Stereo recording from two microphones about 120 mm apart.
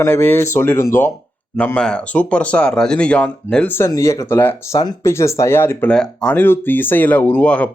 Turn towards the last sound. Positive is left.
turn(degrees=10)  # may be behind; listen again after turning